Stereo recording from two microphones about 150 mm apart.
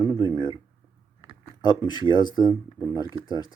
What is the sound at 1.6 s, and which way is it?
Speech, 30° left (ahead or behind).